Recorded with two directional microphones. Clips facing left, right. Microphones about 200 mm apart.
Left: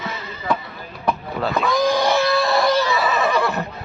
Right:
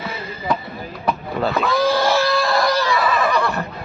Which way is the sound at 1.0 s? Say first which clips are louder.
Right 1 dB; centre (ahead or behind).